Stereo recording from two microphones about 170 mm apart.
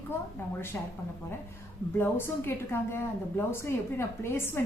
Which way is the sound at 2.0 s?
15° left (ahead or behind).